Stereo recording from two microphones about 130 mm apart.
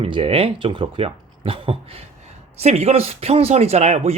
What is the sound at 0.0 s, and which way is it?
Speech, 45° right (ahead or behind).